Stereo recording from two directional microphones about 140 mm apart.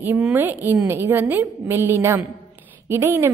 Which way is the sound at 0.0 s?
15° right (ahead or behind).